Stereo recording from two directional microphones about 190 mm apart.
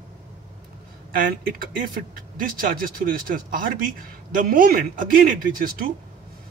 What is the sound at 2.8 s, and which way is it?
A man's voice, 50° right (ahead or behind).